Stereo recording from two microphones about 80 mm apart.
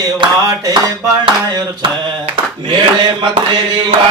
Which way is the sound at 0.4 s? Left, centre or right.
Right.